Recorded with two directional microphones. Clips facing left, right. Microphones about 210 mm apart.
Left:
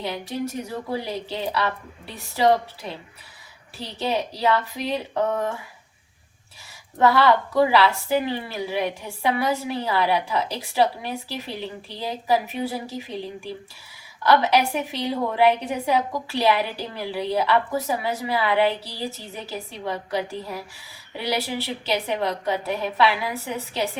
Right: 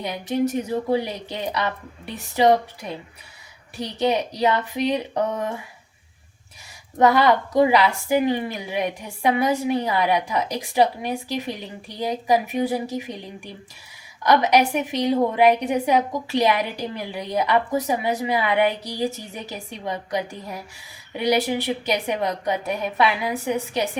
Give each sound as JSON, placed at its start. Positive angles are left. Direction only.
{"t": 0.0, "sound": "a woman's voice", "side_deg": -15}
{"t": 3.8, "sound": "a woman's voice", "side_deg": -15}
{"t": 7.0, "sound": "a woman's voice", "side_deg": -15}